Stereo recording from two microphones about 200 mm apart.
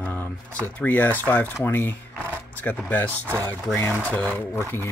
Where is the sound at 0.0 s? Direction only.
10° left (ahead or behind).